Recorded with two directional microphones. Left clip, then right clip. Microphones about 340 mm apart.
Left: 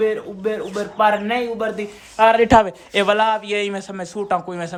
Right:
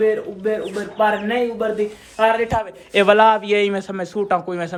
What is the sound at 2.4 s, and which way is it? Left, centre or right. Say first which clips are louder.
Speech: left 8 dB; left.